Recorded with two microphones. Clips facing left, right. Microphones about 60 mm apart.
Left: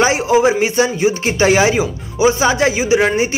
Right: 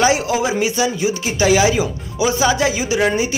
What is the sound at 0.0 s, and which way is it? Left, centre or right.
A man's voice, left.